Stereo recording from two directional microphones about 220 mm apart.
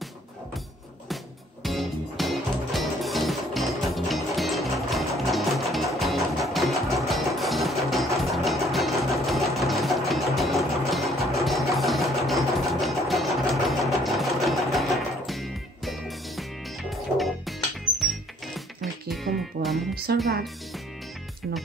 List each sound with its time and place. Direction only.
1.6 s music: centre (ahead or behind)
20.1 s music: 45° right (ahead or behind)